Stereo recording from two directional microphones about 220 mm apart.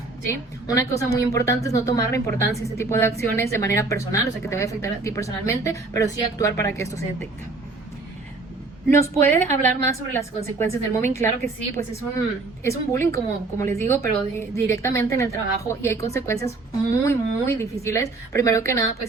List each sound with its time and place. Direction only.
0.3 s a woman's voice: 15° left (ahead or behind)
8.9 s a woman's voice: 10° left (ahead or behind)
9.5 s a woman's voice: 35° right (ahead or behind)
9.8 s a woman's voice: 15° left (ahead or behind)